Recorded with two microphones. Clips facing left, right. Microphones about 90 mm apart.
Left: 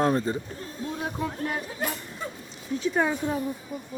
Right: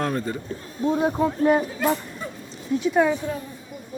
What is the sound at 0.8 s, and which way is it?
Speech, 30° right (ahead or behind).